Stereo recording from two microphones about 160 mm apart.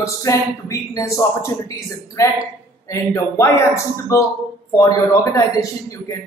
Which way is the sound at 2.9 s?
20° left (ahead or behind).